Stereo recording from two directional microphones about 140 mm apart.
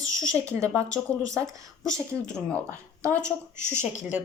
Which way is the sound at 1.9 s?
5° left (ahead or behind).